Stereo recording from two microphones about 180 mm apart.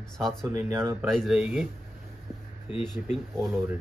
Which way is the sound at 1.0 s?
Centre (ahead or behind).